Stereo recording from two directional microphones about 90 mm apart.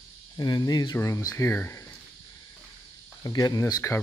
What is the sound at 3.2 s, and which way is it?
Speech, 45° left (ahead or behind).